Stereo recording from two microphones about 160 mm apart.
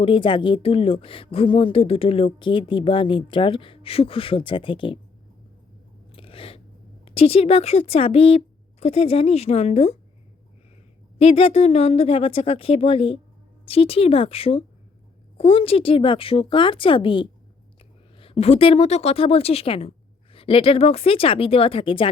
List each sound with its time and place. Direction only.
0.0 s speech: 35° left (ahead or behind)
6.1 s a sound: 35° left (ahead or behind)
7.0 s speech: 35° left (ahead or behind)
11.2 s speech: 40° left (ahead or behind)